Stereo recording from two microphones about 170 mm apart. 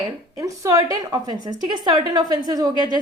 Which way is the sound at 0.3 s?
20° right (ahead or behind).